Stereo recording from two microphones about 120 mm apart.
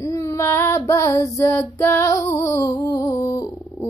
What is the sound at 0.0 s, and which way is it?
Female singing, 25° left (ahead or behind).